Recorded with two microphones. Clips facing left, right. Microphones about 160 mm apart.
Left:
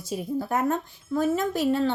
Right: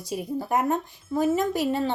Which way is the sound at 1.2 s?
5° right (ahead or behind).